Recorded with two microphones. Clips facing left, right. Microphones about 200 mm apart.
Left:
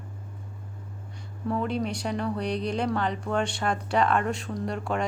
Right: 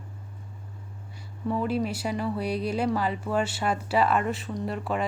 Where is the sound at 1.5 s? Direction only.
5° right (ahead or behind).